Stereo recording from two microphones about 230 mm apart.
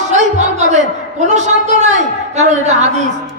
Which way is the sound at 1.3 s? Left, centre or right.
Right.